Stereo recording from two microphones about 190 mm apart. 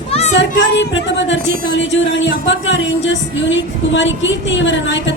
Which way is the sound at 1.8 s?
75° left (ahead or behind).